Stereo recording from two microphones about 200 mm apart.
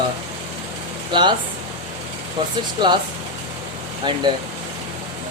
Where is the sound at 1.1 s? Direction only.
25° right (ahead or behind).